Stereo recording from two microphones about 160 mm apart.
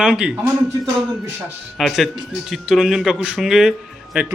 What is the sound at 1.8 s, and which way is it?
Speech, centre (ahead or behind).